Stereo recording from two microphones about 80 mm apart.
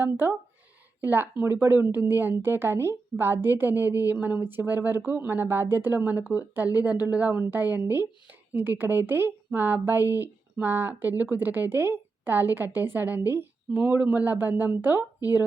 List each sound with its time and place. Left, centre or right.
0.0 s a woman's voice: right